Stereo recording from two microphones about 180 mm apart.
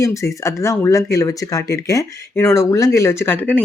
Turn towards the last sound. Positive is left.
turn(degrees=10)  # may be behind; listen again after turning